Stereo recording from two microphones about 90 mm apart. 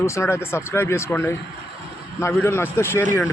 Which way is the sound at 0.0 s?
30° left (ahead or behind).